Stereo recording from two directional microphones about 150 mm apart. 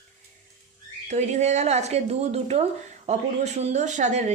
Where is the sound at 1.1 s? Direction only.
50° right (ahead or behind).